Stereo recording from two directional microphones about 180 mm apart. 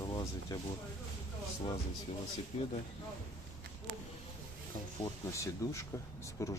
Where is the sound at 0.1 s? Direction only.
25° left (ahead or behind).